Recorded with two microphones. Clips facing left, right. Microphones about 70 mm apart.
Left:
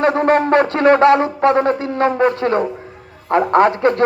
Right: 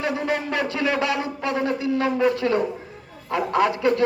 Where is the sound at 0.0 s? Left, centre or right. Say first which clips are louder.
Left 11 dB; left.